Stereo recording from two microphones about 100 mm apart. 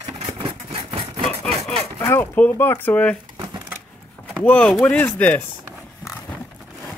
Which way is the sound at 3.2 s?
40° right (ahead or behind).